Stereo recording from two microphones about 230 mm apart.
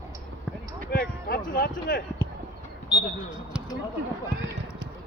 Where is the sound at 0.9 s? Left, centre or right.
Left.